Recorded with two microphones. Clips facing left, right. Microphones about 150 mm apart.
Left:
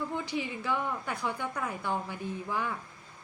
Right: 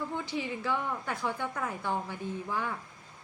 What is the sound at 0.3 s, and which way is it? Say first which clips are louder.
A woman's voice: even; 15° left (ahead or behind).